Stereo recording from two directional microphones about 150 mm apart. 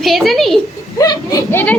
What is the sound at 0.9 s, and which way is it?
Speech, 25° left (ahead or behind).